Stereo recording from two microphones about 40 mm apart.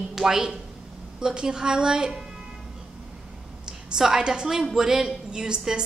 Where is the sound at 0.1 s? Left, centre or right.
Centre.